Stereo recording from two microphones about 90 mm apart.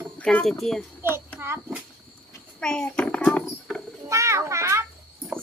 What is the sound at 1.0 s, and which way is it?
Child singing, 25° right (ahead or behind).